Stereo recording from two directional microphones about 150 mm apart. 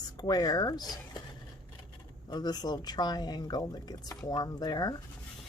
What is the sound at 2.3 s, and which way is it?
Speech, 25° left (ahead or behind).